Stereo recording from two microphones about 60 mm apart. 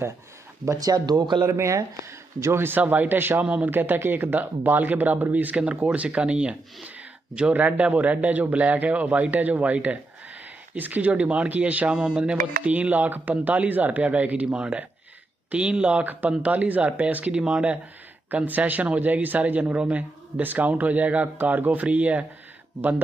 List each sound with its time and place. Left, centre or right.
0.7 s speech: right
2.8 s speech: right
18.3 s speech: right